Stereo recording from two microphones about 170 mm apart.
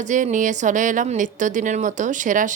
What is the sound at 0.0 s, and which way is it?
A woman's voice, 45° right (ahead or behind).